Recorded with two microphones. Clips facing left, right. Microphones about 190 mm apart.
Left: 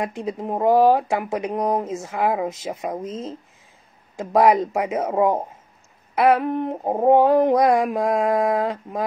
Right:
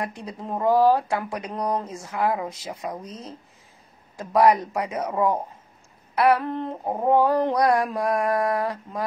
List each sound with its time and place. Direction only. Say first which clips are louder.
0.0 s speech: left 6 dB; 20° left (ahead or behind)